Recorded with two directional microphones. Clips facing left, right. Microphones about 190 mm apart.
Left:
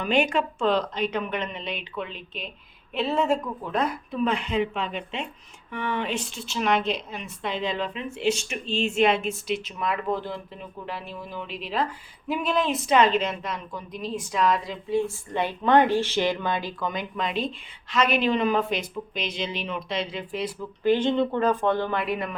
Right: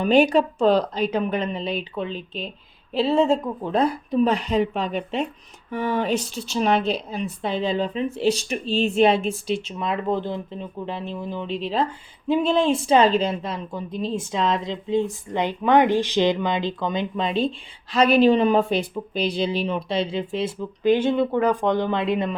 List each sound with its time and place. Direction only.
0.0 s speech: 35° right (ahead or behind)
20.9 s speech: 10° right (ahead or behind); by 22.4 s 25° right (ahead or behind)